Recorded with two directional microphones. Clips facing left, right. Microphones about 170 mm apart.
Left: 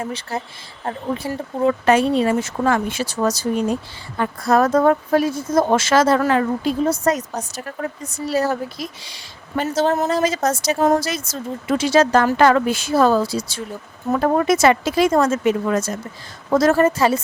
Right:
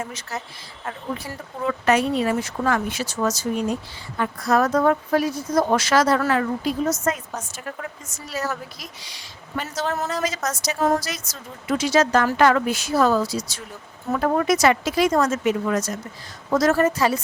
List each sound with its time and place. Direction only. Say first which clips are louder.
0.0 s a woman's voice: left 5 dB; 30° left (ahead or behind)
4.7 s speech: left 4 dB; 45° left (ahead or behind)
5.1 s a woman's voice: left 3 dB; 25° left (ahead or behind)